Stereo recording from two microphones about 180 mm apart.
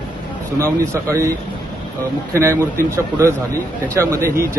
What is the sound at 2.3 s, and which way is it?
Speech, 15° right (ahead or behind).